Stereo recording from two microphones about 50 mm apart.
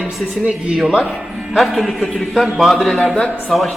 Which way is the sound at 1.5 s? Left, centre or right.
Centre.